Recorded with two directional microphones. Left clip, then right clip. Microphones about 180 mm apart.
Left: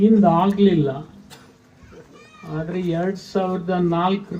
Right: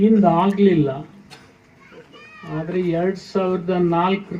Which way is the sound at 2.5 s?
40° right (ahead or behind).